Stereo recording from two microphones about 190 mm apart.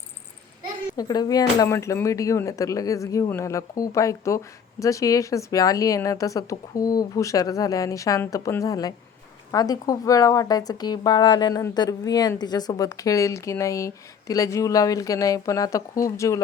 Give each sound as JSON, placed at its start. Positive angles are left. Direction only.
{"t": 0.9, "sound": "speech", "side_deg": 20}